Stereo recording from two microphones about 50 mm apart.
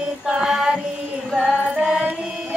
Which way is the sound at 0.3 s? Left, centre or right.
Centre.